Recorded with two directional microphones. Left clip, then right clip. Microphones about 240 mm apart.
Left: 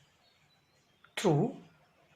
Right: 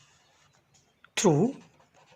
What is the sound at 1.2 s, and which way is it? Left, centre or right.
Speech, right.